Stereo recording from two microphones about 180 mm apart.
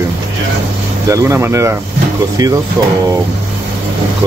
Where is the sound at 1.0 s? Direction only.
15° right (ahead or behind).